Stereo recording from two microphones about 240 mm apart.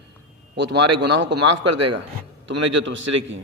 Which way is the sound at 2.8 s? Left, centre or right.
Right.